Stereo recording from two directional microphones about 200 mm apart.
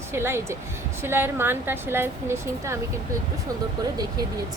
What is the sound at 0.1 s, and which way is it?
A woman's voice, 10° right (ahead or behind).